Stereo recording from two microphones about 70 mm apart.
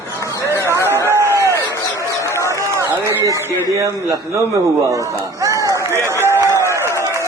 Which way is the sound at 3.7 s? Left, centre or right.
Right.